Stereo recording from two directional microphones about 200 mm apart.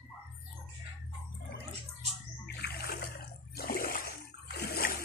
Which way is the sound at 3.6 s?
45° left (ahead or behind).